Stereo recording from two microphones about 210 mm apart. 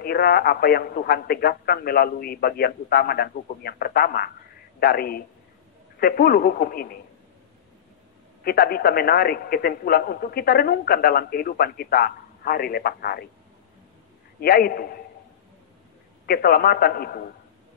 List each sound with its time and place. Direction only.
0.0 s a man's voice: 45° left (ahead or behind)
8.5 s a man's voice: 45° left (ahead or behind)
14.4 s a man's voice: 45° left (ahead or behind)
16.3 s a man's voice: 45° left (ahead or behind)